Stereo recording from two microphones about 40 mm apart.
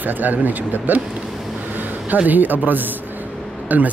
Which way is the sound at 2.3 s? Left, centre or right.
Right.